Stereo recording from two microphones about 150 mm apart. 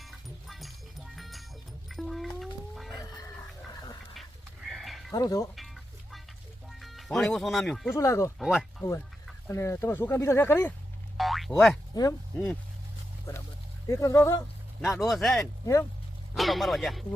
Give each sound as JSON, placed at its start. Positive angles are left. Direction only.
{"t": 0.0, "sound": "music", "side_deg": 0}
{"t": 3.0, "sound": "chicken", "side_deg": 25}
{"t": 4.1, "sound": "goat", "side_deg": 0}
{"t": 5.1, "sound": "speech", "side_deg": 25}
{"t": 5.5, "sound": "music", "side_deg": 0}
{"t": 6.7, "sound": "speech", "side_deg": 0}
{"t": 7.9, "sound": "speech", "side_deg": 20}
{"t": 8.4, "sound": "speech", "side_deg": 0}
{"t": 8.8, "sound": "speech", "side_deg": 20}
{"t": 11.2, "sound": "boing", "side_deg": 0}
{"t": 13.8, "sound": "speech", "side_deg": 20}
{"t": 15.0, "sound": "speech", "side_deg": 0}
{"t": 15.6, "sound": "speech", "side_deg": 20}
{"t": 16.3, "sound": "speech", "side_deg": 0}